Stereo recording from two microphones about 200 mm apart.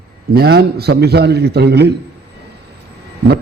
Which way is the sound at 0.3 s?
55° right (ahead or behind).